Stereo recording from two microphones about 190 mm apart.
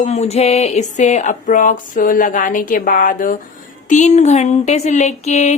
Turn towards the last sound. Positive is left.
turn(degrees=35)  # may be behind; listen again after turning